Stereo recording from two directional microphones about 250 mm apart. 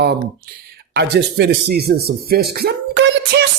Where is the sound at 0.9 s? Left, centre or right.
Right.